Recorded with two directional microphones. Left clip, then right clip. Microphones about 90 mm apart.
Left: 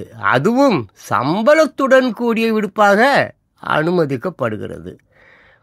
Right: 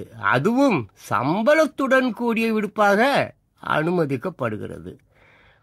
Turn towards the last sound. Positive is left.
turn(degrees=30)  # may be behind; listen again after turning